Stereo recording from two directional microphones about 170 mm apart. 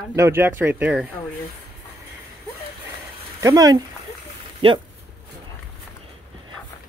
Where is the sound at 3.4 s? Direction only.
20° right (ahead or behind).